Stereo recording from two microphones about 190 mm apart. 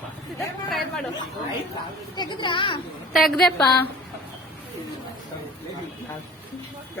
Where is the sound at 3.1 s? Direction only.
Centre (ahead or behind).